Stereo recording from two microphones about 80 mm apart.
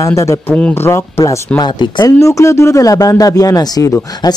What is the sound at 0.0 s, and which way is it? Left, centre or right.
Speech, left.